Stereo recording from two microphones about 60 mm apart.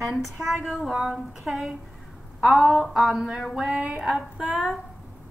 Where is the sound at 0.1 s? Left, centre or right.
Centre.